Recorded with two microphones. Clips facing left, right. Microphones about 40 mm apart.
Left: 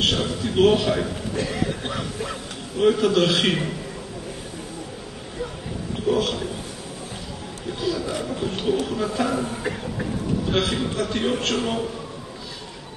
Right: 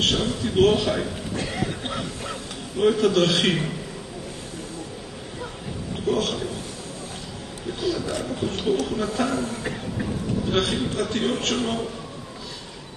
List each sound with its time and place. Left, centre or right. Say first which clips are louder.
0.0 s a man's voice: even; centre
1.4 s chuckle: left 3 dB; centre
2.8 s a man's voice: left 1 dB; centre
5.9 s a man's voice: left 2 dB; centre
7.8 s a man's voice: even; centre
9.3 s a sound: left 1 dB; centre
10.5 s a man's voice: right 1 dB; centre